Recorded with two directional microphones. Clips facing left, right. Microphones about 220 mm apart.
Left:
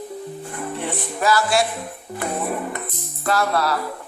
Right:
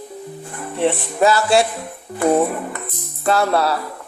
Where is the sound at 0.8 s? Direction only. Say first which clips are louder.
Right 9 dB; 25° right (ahead or behind).